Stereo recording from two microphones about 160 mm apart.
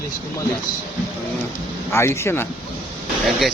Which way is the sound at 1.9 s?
15° left (ahead or behind).